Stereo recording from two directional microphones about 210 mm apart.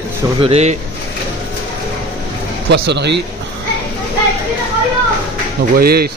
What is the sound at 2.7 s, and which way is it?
Speech, 55° right (ahead or behind).